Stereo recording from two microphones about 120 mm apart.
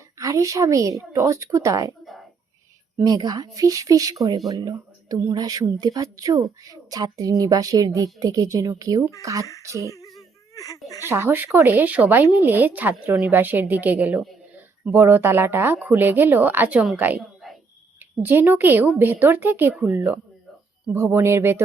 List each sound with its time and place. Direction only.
0.2 s a woman's voice: 30° right (ahead or behind)
3.0 s a woman's voice: 35° right (ahead or behind)
9.9 s baby cry: 30° left (ahead or behind)
10.8 s speech: 30° left (ahead or behind)
11.1 s a woman's voice: 20° right (ahead or behind)
17.2 s a sound: centre (ahead or behind)
18.2 s a woman's voice: 15° right (ahead or behind)